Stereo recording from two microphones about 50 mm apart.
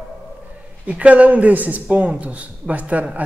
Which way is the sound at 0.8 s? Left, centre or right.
Right.